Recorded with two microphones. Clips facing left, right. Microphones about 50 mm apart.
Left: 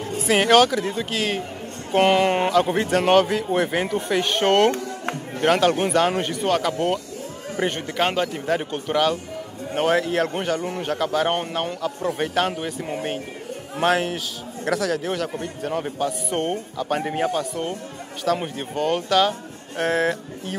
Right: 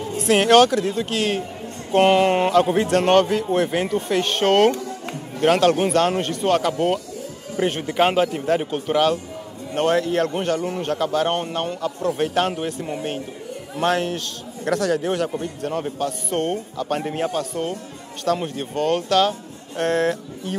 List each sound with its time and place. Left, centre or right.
0.2 s a man's voice: centre
13.7 s a man's voice: centre